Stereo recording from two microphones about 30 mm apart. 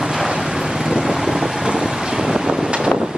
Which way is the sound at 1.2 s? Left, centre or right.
Centre.